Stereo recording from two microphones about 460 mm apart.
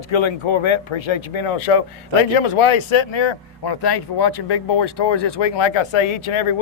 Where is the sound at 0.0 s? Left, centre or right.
Left.